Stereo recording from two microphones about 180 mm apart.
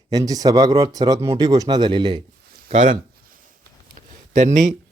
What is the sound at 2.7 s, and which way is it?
Speech, 40° right (ahead or behind).